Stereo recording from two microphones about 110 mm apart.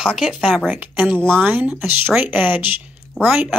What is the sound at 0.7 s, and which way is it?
Speech, 10° right (ahead or behind).